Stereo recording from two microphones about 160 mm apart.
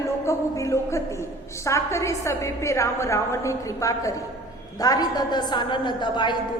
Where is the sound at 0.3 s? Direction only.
20° left (ahead or behind).